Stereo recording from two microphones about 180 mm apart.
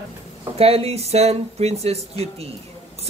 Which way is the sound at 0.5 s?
35° right (ahead or behind).